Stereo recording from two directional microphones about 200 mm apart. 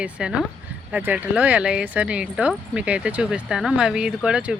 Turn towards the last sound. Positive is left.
turn(degrees=-5)  # may be behind; listen again after turning